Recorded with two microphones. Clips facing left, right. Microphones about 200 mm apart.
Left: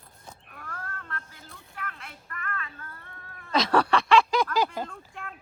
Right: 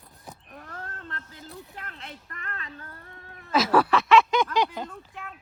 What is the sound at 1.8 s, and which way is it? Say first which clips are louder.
Speech: left 1 dB; 35° right (ahead or behind).